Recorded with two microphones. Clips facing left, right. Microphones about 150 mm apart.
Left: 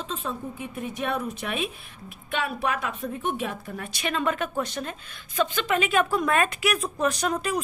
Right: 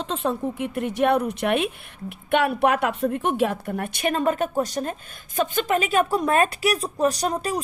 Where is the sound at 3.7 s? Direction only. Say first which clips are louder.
Right 5 dB; 55° right (ahead or behind); by 7.6 s 35° right (ahead or behind).